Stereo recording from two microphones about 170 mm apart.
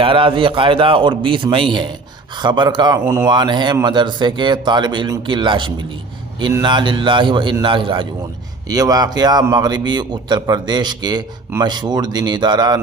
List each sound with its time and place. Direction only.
0.0 s a man's voice: 30° right (ahead or behind)